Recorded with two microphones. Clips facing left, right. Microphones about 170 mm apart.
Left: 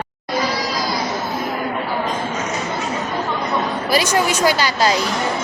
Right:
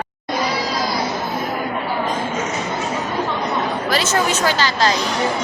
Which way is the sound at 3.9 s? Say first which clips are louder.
Left 3 dB; 10° left (ahead or behind).